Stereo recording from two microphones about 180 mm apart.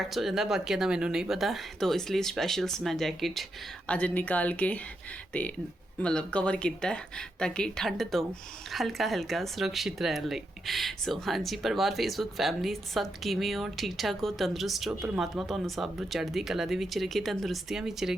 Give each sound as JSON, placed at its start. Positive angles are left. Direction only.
{"t": 0.1, "sound": "a woman's voice", "side_deg": 0}